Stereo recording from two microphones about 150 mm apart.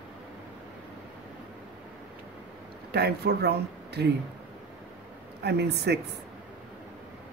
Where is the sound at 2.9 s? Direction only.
90° right.